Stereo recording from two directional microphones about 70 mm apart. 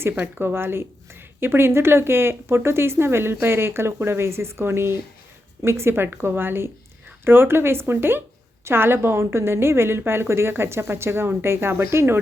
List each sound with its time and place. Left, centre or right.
0.2 s a woman's voice: right